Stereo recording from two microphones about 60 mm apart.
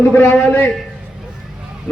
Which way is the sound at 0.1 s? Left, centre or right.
Left.